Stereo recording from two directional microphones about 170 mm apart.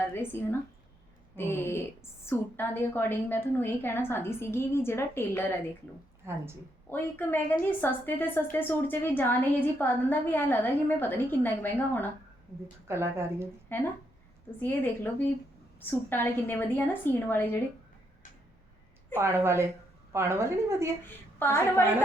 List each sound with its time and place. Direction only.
0.1 s a woman's voice: 15° left (ahead or behind)
6.2 s a woman's voice: 15° right (ahead or behind)
6.9 s a woman's voice: 10° left (ahead or behind)
12.9 s a woman's voice: 15° right (ahead or behind)
13.7 s a woman's voice: 10° left (ahead or behind)
19.2 s a woman's voice: 15° right (ahead or behind)
21.0 s a woman's voice: 15° left (ahead or behind)